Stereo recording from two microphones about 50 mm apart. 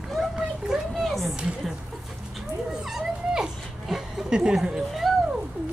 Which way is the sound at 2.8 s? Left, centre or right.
Centre.